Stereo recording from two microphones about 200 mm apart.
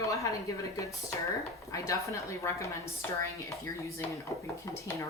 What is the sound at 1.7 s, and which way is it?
Speech, 15° left (ahead or behind).